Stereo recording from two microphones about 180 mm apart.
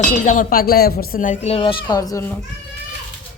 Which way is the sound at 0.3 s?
50° left (ahead or behind).